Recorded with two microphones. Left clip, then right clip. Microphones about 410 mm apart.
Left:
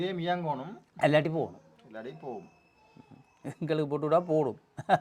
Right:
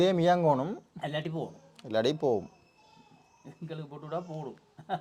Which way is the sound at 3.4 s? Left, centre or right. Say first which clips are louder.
Left 13 dB; left.